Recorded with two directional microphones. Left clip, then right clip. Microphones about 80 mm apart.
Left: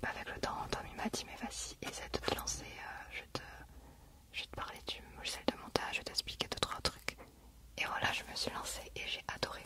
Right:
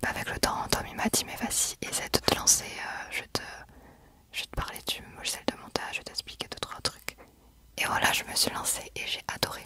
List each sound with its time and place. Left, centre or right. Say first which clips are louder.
0.0 s whispering: right 10 dB; right; by 7.2 s centre
7.7 s whispering: right 10 dB; right